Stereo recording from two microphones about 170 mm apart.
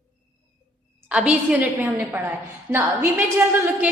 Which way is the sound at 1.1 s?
5° right (ahead or behind).